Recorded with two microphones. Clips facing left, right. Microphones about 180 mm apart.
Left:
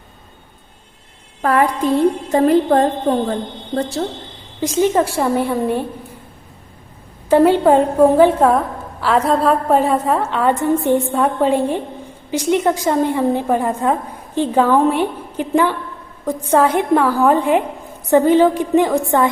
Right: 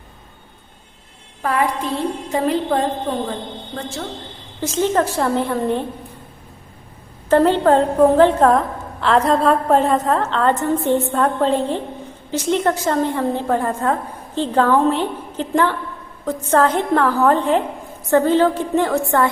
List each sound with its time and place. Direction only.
1.4 s a woman's voice: 45° left (ahead or behind)
3.8 s speech: 35° left (ahead or behind)
4.6 s a woman's voice: 15° left (ahead or behind)
7.3 s a woman's voice: 10° left (ahead or behind)